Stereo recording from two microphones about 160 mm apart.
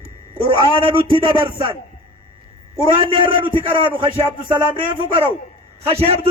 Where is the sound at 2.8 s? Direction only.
30° right (ahead or behind).